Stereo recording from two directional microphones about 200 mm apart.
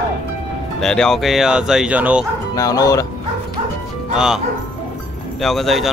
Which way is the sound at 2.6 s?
20° left (ahead or behind).